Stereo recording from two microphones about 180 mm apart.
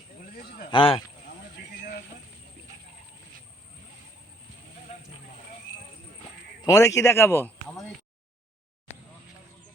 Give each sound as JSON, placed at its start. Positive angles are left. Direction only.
{"t": 0.3, "sound": "a sound", "side_deg": 55}
{"t": 0.7, "sound": "speech", "side_deg": 30}
{"t": 6.6, "sound": "a man's voice", "side_deg": 20}
{"t": 8.9, "sound": "vehicle", "side_deg": 35}